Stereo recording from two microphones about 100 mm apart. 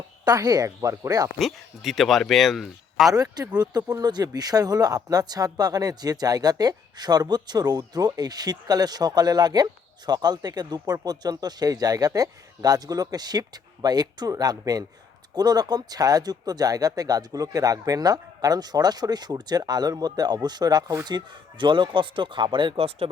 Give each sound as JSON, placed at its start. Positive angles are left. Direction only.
{"t": 0.3, "sound": "speech", "side_deg": -35}
{"t": 1.4, "sound": "speech", "side_deg": 0}
{"t": 3.1, "sound": "speech", "side_deg": -40}